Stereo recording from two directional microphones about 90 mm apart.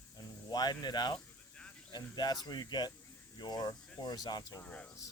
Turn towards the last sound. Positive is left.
turn(degrees=15)  # may be behind; listen again after turning